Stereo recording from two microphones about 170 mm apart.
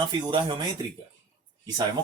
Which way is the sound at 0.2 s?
30° right (ahead or behind).